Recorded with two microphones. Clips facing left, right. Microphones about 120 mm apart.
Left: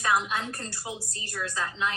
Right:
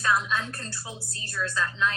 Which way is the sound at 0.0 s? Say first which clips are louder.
Even; 20° left (ahead or behind).